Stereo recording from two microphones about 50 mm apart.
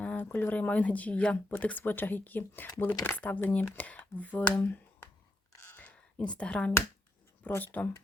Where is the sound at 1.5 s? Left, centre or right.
Left.